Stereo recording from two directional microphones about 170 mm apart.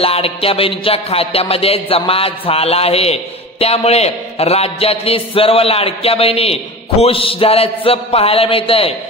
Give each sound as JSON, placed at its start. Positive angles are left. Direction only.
{"t": 0.0, "sound": "music", "side_deg": 35}